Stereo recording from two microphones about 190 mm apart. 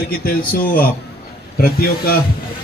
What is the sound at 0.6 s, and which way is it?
A man's voice, 50° left (ahead or behind).